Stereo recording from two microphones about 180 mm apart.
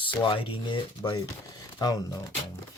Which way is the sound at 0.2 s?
30° left (ahead or behind).